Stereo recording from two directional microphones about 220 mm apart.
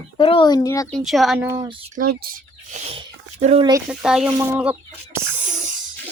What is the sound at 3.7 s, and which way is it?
Speech, 10° right (ahead or behind).